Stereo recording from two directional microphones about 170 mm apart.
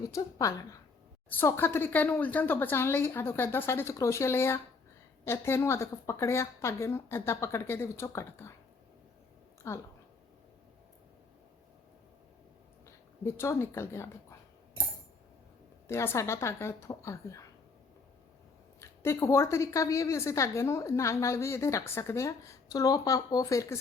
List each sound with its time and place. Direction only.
0.1 s a woman's voice: 20° left (ahead or behind)
9.6 s a woman's voice: 15° left (ahead or behind)
13.2 s a woman's voice: 15° left (ahead or behind)
15.9 s a woman's voice: 15° left (ahead or behind)
18.8 s a woman's voice: 15° left (ahead or behind)